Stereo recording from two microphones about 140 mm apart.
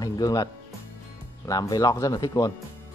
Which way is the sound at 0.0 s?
25° left (ahead or behind).